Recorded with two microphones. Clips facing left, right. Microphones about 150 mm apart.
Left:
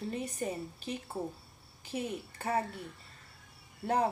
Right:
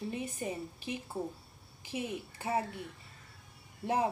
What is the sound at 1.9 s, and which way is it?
Speech, 5° right (ahead or behind).